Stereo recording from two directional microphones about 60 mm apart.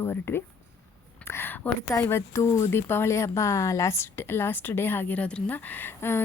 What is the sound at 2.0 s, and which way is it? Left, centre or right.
Speech, left.